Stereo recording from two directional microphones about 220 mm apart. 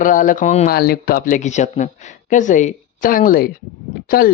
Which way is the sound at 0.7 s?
45° left (ahead or behind).